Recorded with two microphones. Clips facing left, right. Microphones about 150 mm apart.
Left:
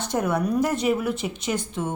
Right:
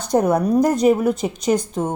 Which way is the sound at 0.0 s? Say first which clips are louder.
Right 7 dB; 40° right (ahead or behind).